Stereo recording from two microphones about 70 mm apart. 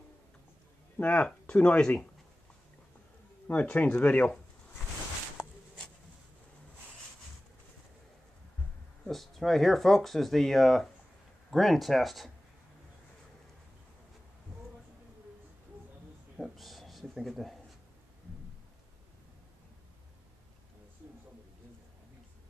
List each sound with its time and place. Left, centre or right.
0.9 s speech: centre
3.5 s speech: centre
9.0 s speech: centre
16.3 s a sound: centre